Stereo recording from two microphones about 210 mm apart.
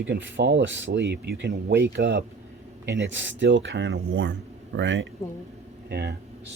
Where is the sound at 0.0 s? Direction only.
60° right (ahead or behind).